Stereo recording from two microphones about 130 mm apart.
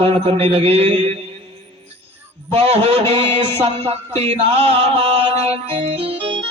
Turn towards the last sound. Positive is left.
turn(degrees=-45)  # may be behind; listen again after turning